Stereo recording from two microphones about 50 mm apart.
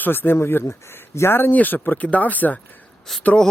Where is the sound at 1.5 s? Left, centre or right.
Left.